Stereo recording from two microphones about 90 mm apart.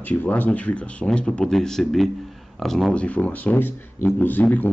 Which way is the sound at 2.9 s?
15° left (ahead or behind).